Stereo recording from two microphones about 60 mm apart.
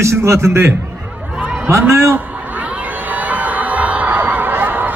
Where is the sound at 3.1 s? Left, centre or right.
Right.